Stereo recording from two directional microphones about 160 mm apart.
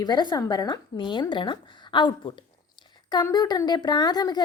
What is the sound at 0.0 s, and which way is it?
A woman's voice, 30° left (ahead or behind).